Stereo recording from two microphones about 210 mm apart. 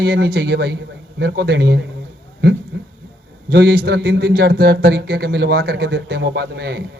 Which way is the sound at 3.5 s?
50° right (ahead or behind).